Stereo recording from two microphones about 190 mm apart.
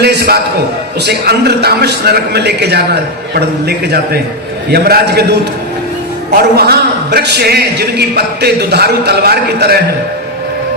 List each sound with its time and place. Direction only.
0.0 s a man's voice: 55° right (ahead or behind)